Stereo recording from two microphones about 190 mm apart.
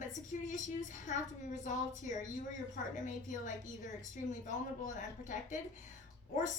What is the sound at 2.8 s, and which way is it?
Speech, 40° left (ahead or behind).